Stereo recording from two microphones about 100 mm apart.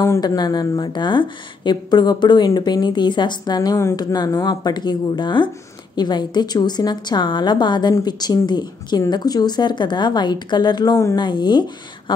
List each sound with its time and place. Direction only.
0.4 s speech: 40° left (ahead or behind)